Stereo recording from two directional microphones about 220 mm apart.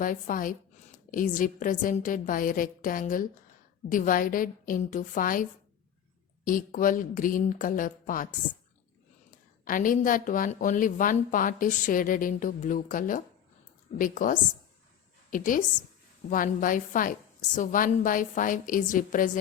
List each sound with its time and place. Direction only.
0.0 s speech: 40° left (ahead or behind)